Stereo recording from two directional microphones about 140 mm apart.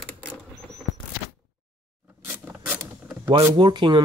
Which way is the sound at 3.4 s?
30° right (ahead or behind).